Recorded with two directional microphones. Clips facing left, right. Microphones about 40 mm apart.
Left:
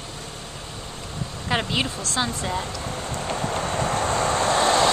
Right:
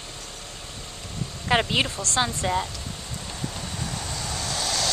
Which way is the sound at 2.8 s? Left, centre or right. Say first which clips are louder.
Left 8 dB; left.